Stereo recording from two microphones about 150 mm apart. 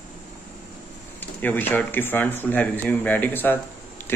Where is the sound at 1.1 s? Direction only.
10° left (ahead or behind).